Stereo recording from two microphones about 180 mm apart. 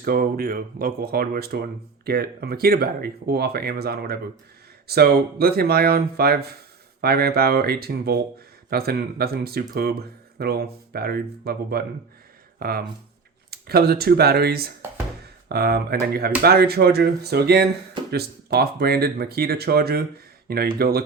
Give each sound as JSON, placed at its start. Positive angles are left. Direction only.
{"t": 0.0, "sound": "speech", "side_deg": -55}